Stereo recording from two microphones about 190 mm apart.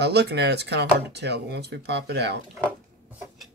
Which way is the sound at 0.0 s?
60° right (ahead or behind).